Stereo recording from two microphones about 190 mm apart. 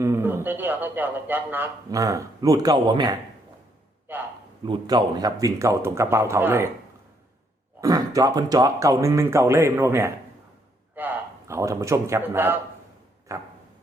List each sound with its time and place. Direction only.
0.0 s a man's voice: 10° right (ahead or behind)
4.1 s a sound: 10° right (ahead or behind)
4.6 s a man's voice: 25° right (ahead or behind)
7.8 s a man's voice: 20° right (ahead or behind)